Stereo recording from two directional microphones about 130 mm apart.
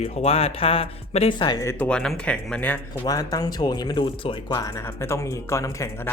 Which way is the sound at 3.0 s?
30° left (ahead or behind).